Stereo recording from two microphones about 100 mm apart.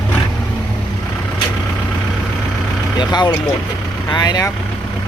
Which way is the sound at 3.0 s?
50° left (ahead or behind).